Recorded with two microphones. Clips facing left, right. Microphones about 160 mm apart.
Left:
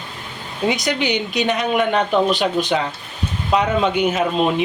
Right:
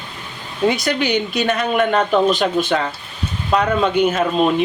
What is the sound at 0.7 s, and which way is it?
Speech, 15° left (ahead or behind).